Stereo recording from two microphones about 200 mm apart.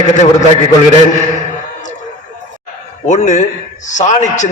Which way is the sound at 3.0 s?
35° left (ahead or behind).